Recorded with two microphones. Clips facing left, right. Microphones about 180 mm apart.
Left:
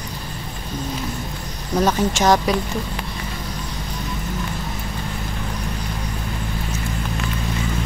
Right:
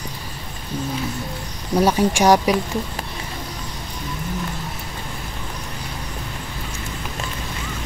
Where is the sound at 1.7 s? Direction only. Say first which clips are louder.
Right 2 dB; 10° right (ahead or behind).